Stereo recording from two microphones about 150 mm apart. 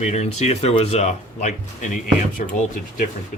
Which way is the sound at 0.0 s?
45° left (ahead or behind).